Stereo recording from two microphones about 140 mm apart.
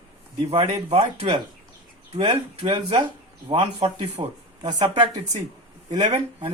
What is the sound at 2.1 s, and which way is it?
A man's voice, 40° right (ahead or behind).